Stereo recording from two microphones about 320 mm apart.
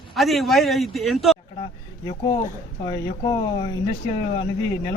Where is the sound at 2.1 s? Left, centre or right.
Centre.